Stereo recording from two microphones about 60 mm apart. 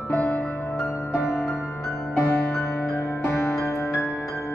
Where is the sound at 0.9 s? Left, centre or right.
Left.